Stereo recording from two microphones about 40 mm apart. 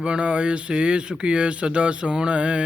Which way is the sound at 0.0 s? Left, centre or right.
Right.